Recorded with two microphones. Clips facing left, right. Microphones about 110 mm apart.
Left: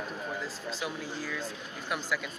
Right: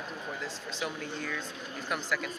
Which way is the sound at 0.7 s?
Centre (ahead or behind).